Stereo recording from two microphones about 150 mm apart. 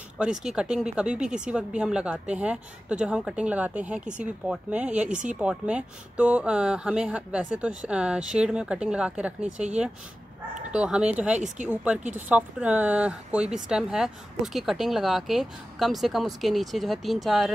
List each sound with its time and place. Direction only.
0.2 s speech: 5° right (ahead or behind)
5.1 s speech: 55° right (ahead or behind)
5.4 s speech: 5° right (ahead or behind)
10.7 s speech: 5° right (ahead or behind)
11.3 s speech: 55° right (ahead or behind)
12.3 s speech: 10° right (ahead or behind)